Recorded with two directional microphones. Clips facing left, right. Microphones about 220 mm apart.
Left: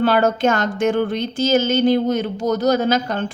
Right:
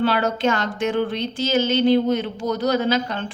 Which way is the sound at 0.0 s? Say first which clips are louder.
Left 4 dB; 45° left (ahead or behind).